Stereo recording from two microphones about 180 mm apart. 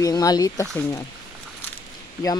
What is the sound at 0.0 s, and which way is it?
Speech, 20° left (ahead or behind).